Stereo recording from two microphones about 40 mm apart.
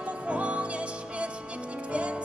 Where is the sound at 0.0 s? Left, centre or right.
Right.